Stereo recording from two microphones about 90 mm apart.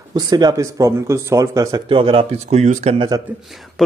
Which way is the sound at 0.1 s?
50° right (ahead or behind).